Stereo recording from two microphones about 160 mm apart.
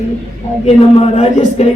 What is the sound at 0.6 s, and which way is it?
A man's voice, 45° left (ahead or behind).